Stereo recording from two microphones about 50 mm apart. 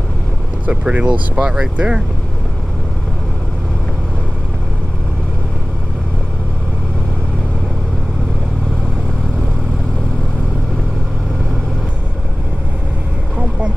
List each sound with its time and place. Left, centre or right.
0.7 s speech: right